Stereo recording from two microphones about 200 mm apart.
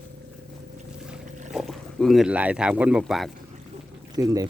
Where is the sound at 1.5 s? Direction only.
Centre (ahead or behind).